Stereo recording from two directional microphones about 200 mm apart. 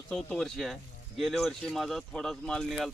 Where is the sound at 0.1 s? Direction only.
5° left (ahead or behind).